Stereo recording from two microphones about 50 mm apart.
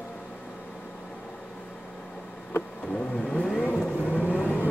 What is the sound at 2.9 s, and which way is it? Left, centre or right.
Vehicle, left.